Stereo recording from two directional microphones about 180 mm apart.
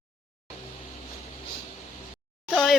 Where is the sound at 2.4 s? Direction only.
Centre (ahead or behind).